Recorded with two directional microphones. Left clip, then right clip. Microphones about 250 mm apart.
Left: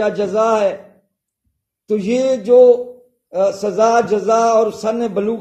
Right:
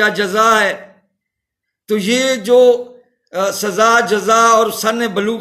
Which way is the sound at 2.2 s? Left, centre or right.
Centre.